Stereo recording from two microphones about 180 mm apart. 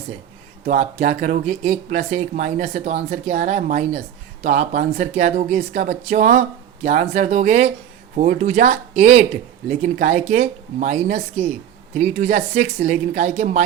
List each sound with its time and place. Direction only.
0.6 s speech: 40° right (ahead or behind)